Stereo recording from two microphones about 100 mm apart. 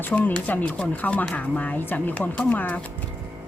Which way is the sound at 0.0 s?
15° left (ahead or behind).